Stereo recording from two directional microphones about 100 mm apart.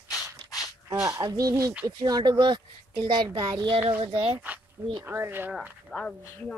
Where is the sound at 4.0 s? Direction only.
60° right (ahead or behind).